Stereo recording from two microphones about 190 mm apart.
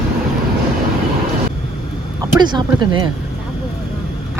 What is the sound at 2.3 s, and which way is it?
Speech, 25° right (ahead or behind).